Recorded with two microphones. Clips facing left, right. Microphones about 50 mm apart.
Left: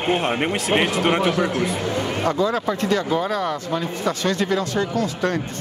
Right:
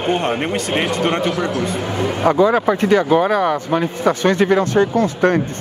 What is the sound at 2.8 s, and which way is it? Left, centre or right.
Speech, right.